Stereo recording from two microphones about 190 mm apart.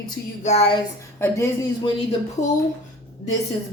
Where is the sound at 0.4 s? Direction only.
30° left (ahead or behind).